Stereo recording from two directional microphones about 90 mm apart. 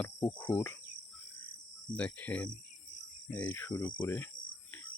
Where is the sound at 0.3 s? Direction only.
20° left (ahead or behind).